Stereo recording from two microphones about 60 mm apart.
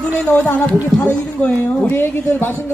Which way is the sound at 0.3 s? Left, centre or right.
Left.